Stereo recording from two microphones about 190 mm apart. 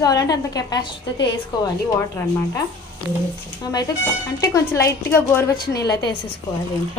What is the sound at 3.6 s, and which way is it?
A woman's voice, 20° left (ahead or behind).